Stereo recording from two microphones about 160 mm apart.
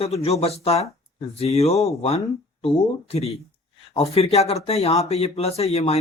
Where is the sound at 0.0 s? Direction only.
40° left (ahead or behind).